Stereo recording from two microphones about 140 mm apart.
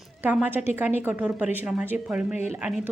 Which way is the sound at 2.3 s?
55° left (ahead or behind).